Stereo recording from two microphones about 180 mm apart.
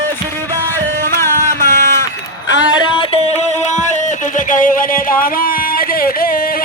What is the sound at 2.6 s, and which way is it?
Music, 25° left (ahead or behind).